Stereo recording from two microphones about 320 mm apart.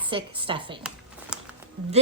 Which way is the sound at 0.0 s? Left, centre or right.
Centre.